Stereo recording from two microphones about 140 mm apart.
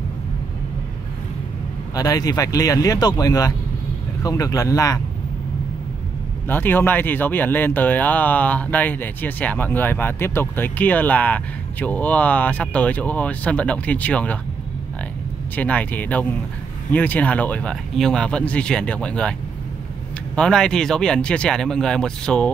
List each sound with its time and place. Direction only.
2.0 s speech: 25° left (ahead or behind)
6.4 s speech: 15° left (ahead or behind)
15.5 s speech: 10° left (ahead or behind)
20.3 s speech: 5° left (ahead or behind)